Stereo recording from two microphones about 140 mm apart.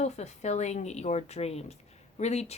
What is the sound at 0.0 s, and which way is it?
Speech, 55° left (ahead or behind).